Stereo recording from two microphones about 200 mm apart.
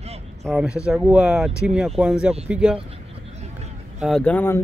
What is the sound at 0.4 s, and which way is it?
Speech, 10° right (ahead or behind).